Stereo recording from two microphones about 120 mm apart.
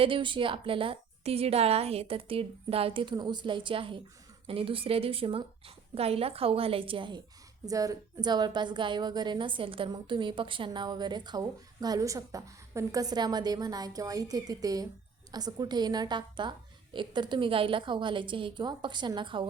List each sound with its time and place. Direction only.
0.0 s a woman's voice: 45° right (ahead or behind)
7.6 s a woman's voice: 30° right (ahead or behind)